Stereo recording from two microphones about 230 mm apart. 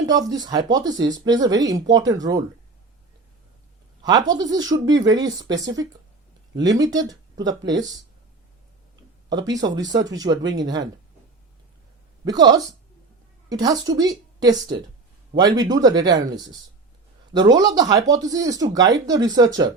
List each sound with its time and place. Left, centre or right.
0.0 s speech: centre
4.0 s speech: centre
6.7 s speech: centre
9.3 s speech: centre
12.2 s speech: centre